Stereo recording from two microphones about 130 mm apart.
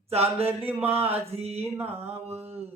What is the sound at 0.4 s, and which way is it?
Music, 15° right (ahead or behind).